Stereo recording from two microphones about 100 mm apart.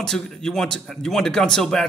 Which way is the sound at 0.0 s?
5° left (ahead or behind).